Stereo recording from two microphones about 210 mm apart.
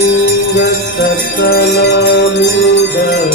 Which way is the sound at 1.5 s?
50° left (ahead or behind).